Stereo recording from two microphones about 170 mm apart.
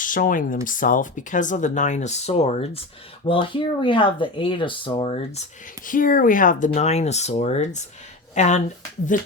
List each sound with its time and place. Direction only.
0.0 s speech: 50° left (ahead or behind)
6.7 s speech: 40° left (ahead or behind)